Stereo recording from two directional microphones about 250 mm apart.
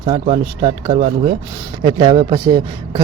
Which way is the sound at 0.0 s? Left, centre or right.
Right.